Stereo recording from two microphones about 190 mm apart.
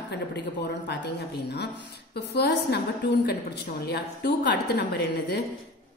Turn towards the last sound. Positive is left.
turn(degrees=60)  # may be behind; listen again after turning